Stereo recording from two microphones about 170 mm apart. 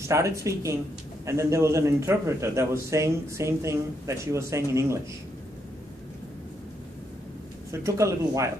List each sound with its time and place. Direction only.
0.1 s a man's voice: 15° right (ahead or behind)
7.8 s a man's voice: 20° right (ahead or behind)